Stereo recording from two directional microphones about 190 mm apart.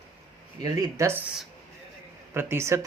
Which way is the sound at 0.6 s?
15° right (ahead or behind).